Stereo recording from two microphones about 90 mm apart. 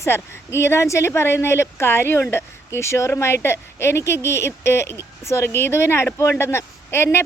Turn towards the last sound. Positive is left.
turn(degrees=25)  # may be behind; listen again after turning